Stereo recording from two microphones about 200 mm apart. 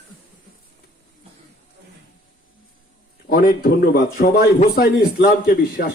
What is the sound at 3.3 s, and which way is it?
Speech, 45° left (ahead or behind).